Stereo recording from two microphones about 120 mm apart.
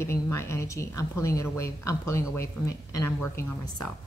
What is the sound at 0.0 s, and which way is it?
A woman's voice, 20° left (ahead or behind).